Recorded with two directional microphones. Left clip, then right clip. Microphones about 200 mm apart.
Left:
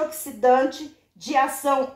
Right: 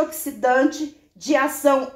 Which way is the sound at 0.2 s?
35° right (ahead or behind).